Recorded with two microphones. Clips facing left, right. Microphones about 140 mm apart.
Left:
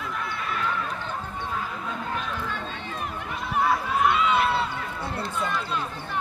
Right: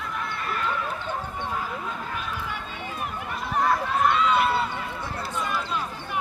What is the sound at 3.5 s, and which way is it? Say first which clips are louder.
Run: even; 5° left (ahead or behind).